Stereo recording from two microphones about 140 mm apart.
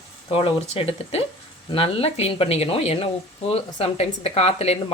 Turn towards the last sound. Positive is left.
turn(degrees=45)  # may be behind; listen again after turning